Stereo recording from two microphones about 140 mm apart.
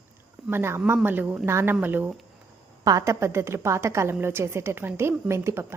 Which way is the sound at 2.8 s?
25° right (ahead or behind).